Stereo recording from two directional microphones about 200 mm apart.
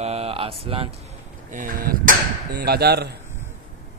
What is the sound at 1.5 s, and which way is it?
Speech, 40° right (ahead or behind).